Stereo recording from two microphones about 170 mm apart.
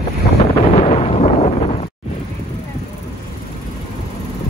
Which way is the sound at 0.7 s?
40° left (ahead or behind).